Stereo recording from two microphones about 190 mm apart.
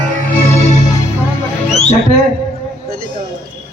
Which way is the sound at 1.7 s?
35° left (ahead or behind).